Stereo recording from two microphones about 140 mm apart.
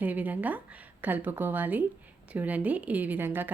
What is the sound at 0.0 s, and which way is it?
A woman's voice, 10° right (ahead or behind).